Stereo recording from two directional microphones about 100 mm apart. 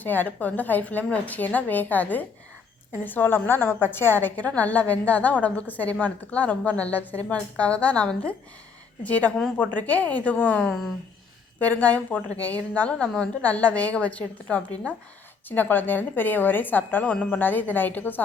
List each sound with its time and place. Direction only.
0.0 s a woman's voice: 20° left (ahead or behind)